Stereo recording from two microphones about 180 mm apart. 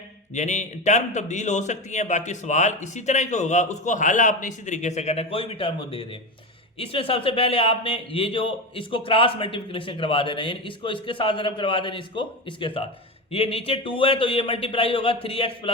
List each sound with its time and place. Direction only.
0.3 s a man's voice: 40° left (ahead or behind)